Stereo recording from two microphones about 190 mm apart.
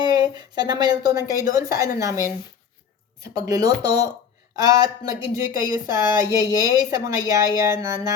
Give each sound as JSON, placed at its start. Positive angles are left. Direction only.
{"t": 0.0, "sound": "a sound", "side_deg": -20}
{"t": 1.5, "sound": "speech", "side_deg": -15}
{"t": 3.3, "sound": "speech", "side_deg": -15}